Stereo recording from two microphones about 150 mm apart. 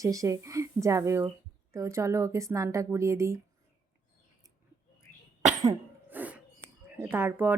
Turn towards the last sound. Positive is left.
turn(degrees=-15)  # may be behind; listen again after turning